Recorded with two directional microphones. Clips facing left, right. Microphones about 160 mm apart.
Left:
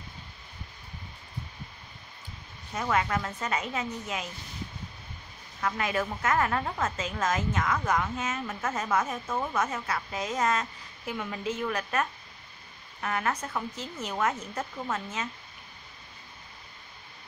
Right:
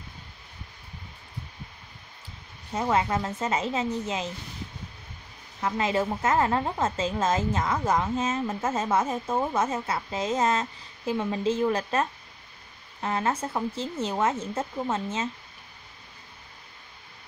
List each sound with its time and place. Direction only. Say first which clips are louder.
2.7 s a woman's voice: right 3 dB; 25° right (ahead or behind)
5.6 s a woman's voice: right 4 dB; 25° right (ahead or behind)